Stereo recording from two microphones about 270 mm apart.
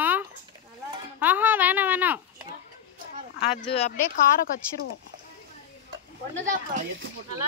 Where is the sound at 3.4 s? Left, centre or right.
Left.